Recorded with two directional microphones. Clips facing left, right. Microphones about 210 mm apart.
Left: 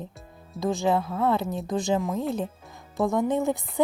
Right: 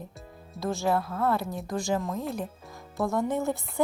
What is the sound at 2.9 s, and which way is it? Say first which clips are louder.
Music: left 4 dB; 15° left (ahead or behind).